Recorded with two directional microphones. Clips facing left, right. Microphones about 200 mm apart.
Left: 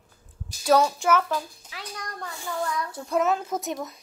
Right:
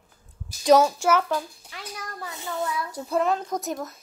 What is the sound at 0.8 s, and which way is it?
Speech, 10° right (ahead or behind).